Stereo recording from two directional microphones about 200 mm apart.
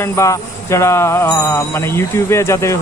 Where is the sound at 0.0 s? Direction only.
15° left (ahead or behind).